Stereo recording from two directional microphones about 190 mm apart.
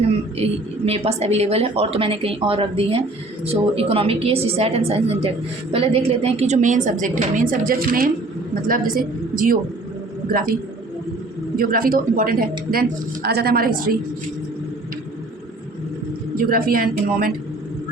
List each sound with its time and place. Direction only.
0.9 s a woman's voice: 30° right (ahead or behind); by 9.6 s 50° right (ahead or behind)
11.5 s speech: 50° right (ahead or behind)
16.4 s speech: 50° right (ahead or behind)